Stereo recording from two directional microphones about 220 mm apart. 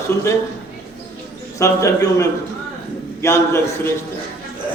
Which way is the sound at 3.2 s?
10° left (ahead or behind).